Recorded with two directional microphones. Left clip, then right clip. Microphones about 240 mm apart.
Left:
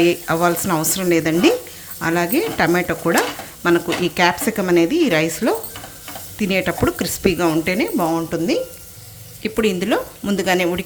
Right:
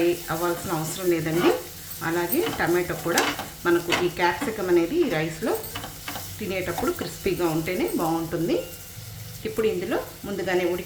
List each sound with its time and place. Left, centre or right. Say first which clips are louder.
0.3 s speech: left 9 dB; left